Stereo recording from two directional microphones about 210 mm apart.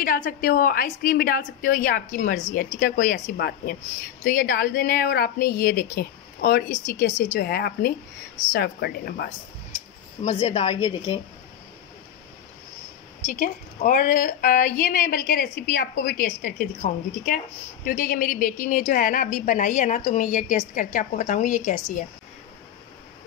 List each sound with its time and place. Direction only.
0.0 s a woman's voice: 40° left (ahead or behind)
9.8 s speech: 25° left (ahead or behind)
13.2 s a woman's voice: 40° left (ahead or behind)